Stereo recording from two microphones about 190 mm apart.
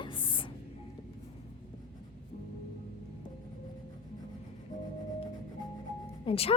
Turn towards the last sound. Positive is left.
turn(degrees=30)  # may be behind; listen again after turning